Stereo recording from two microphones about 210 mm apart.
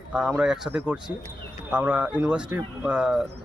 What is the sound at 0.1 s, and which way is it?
Speech, 5° right (ahead or behind).